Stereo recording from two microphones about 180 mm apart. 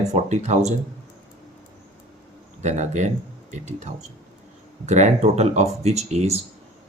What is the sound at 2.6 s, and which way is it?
Speech, 40° right (ahead or behind).